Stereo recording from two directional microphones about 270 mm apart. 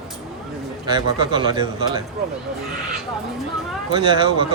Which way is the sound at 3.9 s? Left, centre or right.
Centre.